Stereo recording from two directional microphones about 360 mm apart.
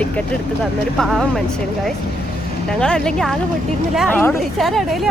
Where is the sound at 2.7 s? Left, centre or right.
Centre.